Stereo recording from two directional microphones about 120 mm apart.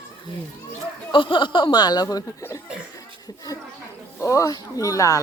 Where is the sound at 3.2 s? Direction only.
30° left (ahead or behind).